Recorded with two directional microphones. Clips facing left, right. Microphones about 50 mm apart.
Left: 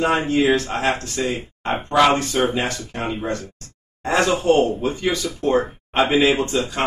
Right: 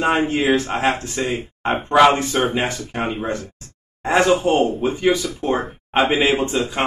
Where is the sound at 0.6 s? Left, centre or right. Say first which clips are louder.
Right 2 dB; centre.